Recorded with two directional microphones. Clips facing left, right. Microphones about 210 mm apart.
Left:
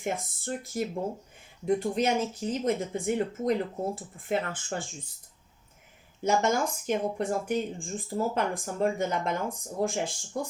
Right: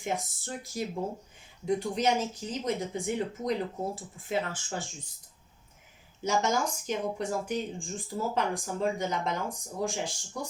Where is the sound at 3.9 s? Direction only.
55° left (ahead or behind).